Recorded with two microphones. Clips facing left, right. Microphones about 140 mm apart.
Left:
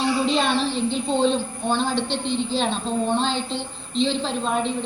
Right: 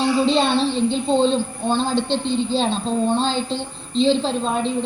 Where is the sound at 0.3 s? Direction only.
30° right (ahead or behind).